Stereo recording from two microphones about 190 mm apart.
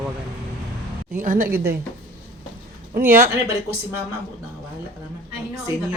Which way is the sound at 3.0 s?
50° right (ahead or behind).